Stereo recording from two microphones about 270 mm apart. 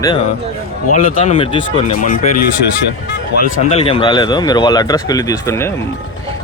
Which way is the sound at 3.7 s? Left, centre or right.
Left.